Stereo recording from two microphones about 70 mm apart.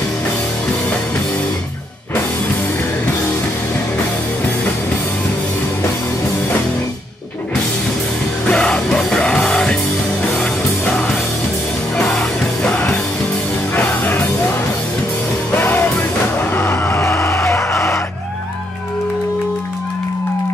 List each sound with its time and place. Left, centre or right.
8.5 s music: centre
15.5 s music: left
17.0 s a sound: left